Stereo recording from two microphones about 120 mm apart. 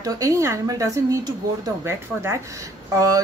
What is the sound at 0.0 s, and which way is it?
Speech, 30° right (ahead or behind).